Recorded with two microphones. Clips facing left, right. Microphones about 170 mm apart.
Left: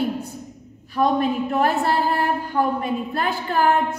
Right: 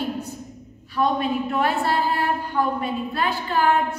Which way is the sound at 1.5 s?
45° left (ahead or behind).